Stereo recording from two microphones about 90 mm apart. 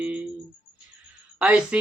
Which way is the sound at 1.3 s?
15° right (ahead or behind).